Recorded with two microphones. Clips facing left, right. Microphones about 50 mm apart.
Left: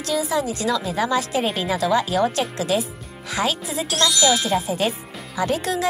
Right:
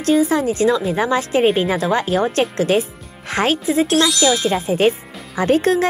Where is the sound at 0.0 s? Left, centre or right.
Right.